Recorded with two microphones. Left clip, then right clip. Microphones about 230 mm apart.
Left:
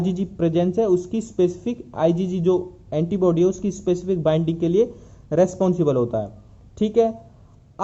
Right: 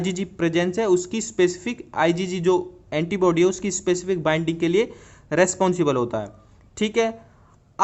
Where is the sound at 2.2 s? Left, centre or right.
Right.